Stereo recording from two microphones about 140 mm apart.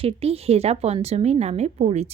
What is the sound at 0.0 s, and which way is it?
Speech, 45° right (ahead or behind).